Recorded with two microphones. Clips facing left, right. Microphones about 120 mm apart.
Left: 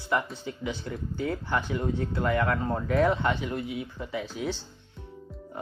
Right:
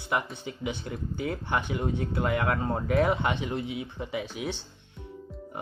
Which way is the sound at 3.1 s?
20° right (ahead or behind).